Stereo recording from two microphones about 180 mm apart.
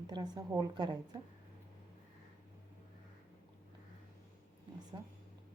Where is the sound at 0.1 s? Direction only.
20° right (ahead or behind).